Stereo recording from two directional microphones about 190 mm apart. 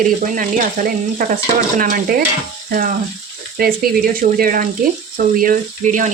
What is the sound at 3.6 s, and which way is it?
Speech, 50° right (ahead or behind).